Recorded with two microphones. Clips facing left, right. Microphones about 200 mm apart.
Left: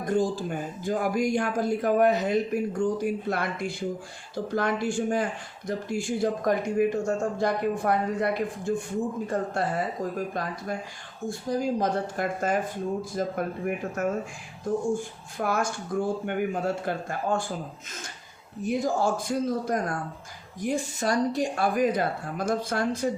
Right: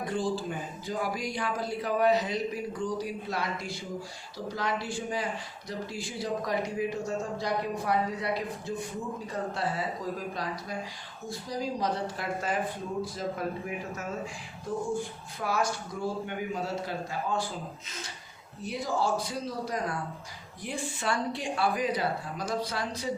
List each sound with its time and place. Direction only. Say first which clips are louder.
0.0 s speech: left 5 dB; 45° left (ahead or behind)
15.4 s speech: left 3 dB; 50° left (ahead or behind)
18.6 s speech: left 5 dB; 50° left (ahead or behind)